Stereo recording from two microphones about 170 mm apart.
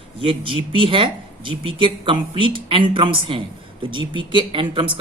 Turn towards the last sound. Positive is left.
turn(degrees=-30)  # may be behind; listen again after turning